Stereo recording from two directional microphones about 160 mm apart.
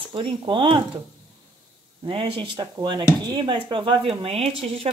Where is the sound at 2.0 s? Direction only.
35° right (ahead or behind).